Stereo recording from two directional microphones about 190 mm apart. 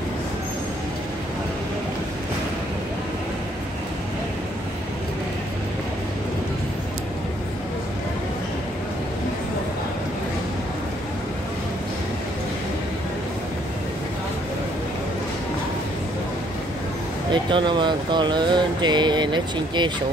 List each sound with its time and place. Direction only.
17.3 s speech: 25° right (ahead or behind)